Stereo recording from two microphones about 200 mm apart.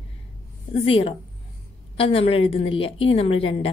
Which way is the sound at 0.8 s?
25° left (ahead or behind).